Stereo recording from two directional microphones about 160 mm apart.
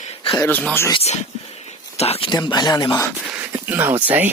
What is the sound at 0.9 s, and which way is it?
Speech, 45° left (ahead or behind).